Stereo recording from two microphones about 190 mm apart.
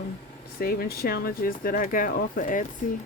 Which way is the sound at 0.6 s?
50° left (ahead or behind).